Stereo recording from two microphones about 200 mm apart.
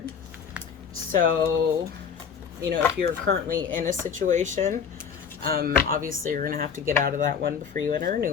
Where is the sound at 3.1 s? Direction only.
45° right (ahead or behind).